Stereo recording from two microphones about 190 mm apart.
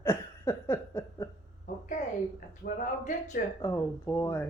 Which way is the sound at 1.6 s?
40° left (ahead or behind).